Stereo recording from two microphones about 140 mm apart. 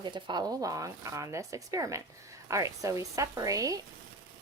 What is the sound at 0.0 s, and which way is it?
A woman's voice, 30° right (ahead or behind).